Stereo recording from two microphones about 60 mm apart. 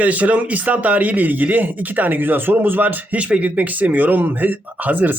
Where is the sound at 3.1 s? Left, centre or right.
Centre.